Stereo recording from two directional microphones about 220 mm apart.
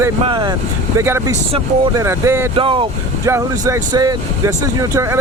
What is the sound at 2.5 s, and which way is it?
Speech, 25° right (ahead or behind).